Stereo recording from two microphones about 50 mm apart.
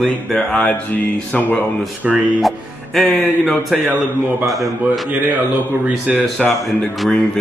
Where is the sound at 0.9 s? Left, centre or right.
Left.